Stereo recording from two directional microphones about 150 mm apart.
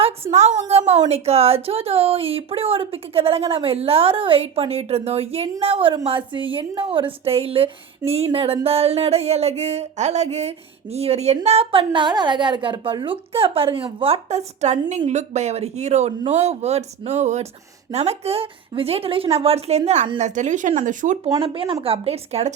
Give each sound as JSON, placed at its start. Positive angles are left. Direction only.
{"t": 0.0, "sound": "a woman's voice", "side_deg": -50}
{"t": 21.3, "sound": "speech", "side_deg": -35}